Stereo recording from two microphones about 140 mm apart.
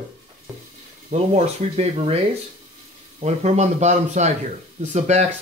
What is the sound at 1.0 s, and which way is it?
Speech, 50° right (ahead or behind).